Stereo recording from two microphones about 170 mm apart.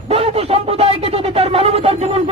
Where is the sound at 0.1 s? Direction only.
35° right (ahead or behind).